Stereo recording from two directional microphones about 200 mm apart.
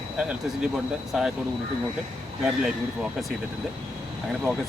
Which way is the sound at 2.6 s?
Centre (ahead or behind).